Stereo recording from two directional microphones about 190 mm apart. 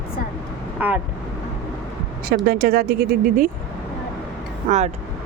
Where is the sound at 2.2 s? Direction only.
55° right (ahead or behind).